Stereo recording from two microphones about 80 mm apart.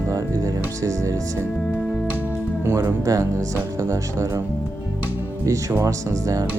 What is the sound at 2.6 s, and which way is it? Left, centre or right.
Speech, right.